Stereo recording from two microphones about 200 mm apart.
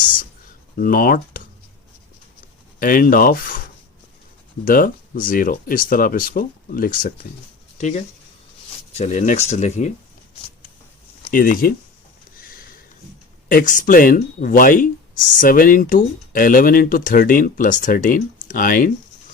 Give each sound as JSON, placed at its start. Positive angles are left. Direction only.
{"t": 0.8, "sound": "speech", "side_deg": 45}
{"t": 2.7, "sound": "speech", "side_deg": 45}
{"t": 4.6, "sound": "speech", "side_deg": 45}
{"t": 11.3, "sound": "speech", "side_deg": 45}
{"t": 13.5, "sound": "speech", "side_deg": 40}